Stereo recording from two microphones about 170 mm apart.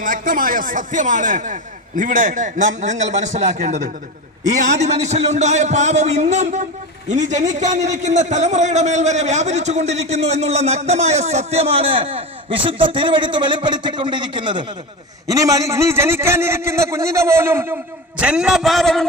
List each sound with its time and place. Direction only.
0.0 s a man's voice: 55° right (ahead or behind); by 19.0 s centre (ahead or behind)